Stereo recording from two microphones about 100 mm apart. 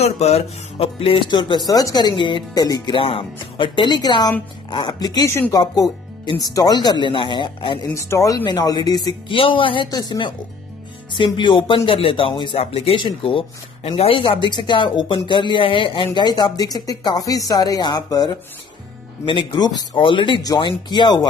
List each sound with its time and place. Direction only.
0.0 s speech: 90° left; by 1.2 s 70° left (ahead or behind)
1.3 s speech: 50° left (ahead or behind)
1.7 s speech: 35° left (ahead or behind); by 2.4 s 55° left (ahead or behind)
2.5 s speech: 40° left (ahead or behind)
3.1 s speech: 60° left (ahead or behind); by 5.2 s 45° left (ahead or behind)
5.2 s speech: 25° left (ahead or behind)
5.6 s speech: 45° left (ahead or behind)
7.9 s a woman's voice: 30° left (ahead or behind)
9.3 s speech: 60° left (ahead or behind)
9.8 s speech: 45° left (ahead or behind)
12.5 s speech: 75° left (ahead or behind)
14.5 s speech: 55° left (ahead or behind)